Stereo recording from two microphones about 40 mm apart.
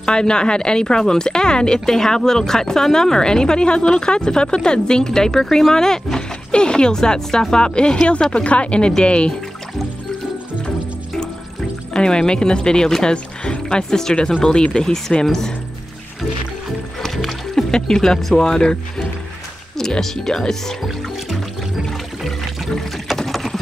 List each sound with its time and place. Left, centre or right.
0.0 s a woman's voice: centre
11.9 s a woman's voice: left
17.0 s a woman's voice: centre
21.8 s music: centre
23.1 s boat: centre